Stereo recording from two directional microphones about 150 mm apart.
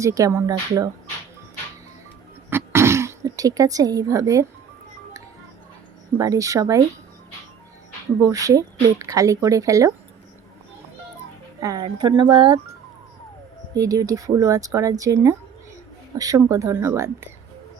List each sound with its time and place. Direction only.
0.0 s speech: 20° right (ahead or behind)
2.5 s throat clearing: 15° right (ahead or behind)
6.1 s speech: 20° right (ahead or behind)
8.2 s speech: 20° right (ahead or behind)
11.6 s speech: 25° right (ahead or behind)
13.7 s speech: 25° right (ahead or behind)